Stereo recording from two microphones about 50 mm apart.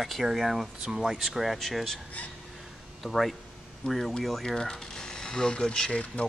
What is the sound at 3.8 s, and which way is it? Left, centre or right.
Speech, centre.